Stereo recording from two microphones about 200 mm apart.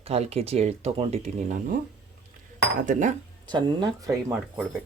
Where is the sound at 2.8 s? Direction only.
40° right (ahead or behind).